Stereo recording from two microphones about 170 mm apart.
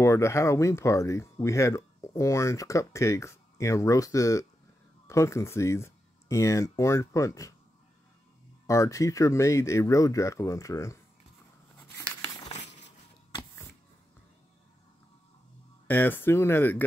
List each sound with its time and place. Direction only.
0.0 s speech: 15° left (ahead or behind)
8.6 s speech: 20° left (ahead or behind)
15.9 s speech: 10° left (ahead or behind)